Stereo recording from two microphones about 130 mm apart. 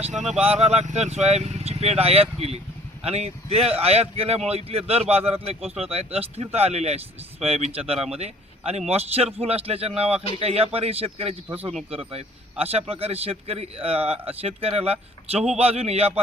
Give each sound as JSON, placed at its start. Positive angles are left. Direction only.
{"t": 0.0, "sound": "speech", "side_deg": -65}
{"t": 0.4, "sound": "speech", "side_deg": -55}